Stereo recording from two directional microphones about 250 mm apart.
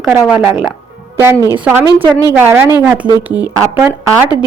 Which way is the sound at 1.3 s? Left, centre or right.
Centre.